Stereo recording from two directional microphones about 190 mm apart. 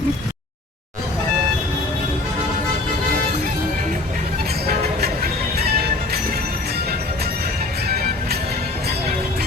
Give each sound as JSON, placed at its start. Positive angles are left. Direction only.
{"t": 4.6, "sound": "music", "side_deg": -55}
{"t": 7.9, "sound": "music", "side_deg": -55}